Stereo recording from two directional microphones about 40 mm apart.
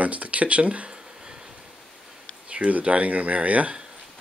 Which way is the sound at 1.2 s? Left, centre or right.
Centre.